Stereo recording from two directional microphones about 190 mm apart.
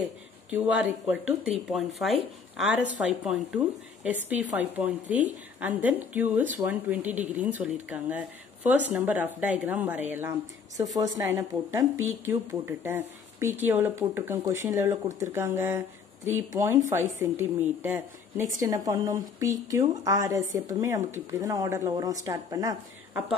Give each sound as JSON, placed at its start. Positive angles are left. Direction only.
{"t": 0.5, "sound": "a woman's voice", "side_deg": -5}